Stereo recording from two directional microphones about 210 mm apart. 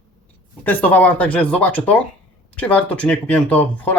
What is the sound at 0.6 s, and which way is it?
Speech, 10° left (ahead or behind).